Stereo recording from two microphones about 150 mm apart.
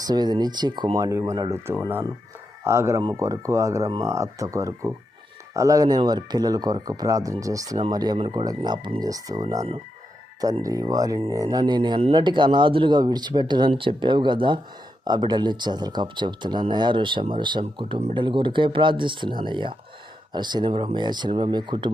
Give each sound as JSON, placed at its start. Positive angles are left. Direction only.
{"t": 0.1, "sound": "speech", "side_deg": -25}